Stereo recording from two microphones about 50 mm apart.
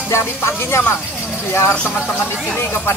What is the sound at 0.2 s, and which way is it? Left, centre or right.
Speech, left.